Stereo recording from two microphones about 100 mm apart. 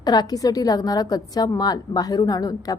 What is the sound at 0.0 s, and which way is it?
A woman's voice, 40° left (ahead or behind).